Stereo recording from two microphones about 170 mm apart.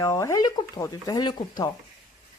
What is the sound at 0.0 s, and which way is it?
Speech, 20° left (ahead or behind).